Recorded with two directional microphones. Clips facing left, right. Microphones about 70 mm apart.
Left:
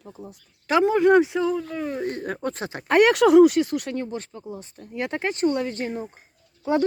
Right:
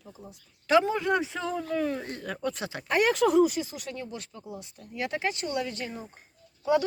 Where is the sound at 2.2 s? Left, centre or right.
Left.